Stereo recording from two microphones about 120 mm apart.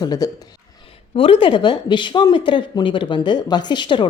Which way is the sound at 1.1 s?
50° left (ahead or behind).